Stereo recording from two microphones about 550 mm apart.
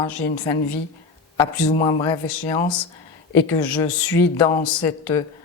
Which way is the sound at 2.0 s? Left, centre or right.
Left.